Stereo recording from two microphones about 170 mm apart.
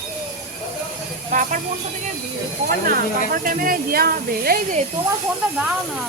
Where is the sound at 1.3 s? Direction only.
50° right (ahead or behind).